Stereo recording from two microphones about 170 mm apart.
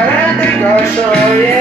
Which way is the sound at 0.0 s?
10° left (ahead or behind).